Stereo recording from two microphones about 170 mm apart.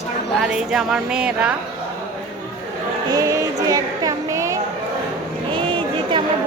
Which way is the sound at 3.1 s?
20° right (ahead or behind).